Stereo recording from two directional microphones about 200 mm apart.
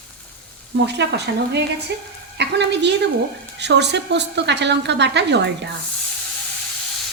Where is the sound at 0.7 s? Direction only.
60° right (ahead or behind).